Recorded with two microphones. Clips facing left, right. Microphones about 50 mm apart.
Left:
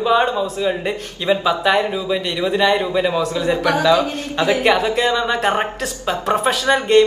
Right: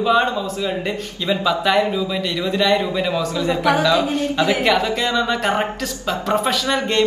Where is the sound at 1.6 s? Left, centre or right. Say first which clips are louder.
Even; centre.